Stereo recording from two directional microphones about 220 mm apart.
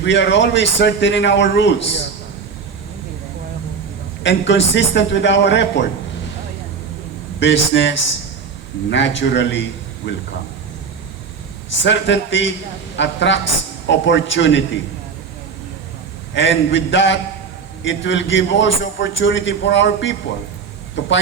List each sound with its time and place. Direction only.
0.0 s a man's voice: 55° left (ahead or behind)
4.2 s a man's voice: 55° left (ahead or behind)
7.3 s a man's voice: 55° left (ahead or behind)
11.8 s a man's voice: 55° left (ahead or behind)
16.3 s a man's voice: 55° left (ahead or behind)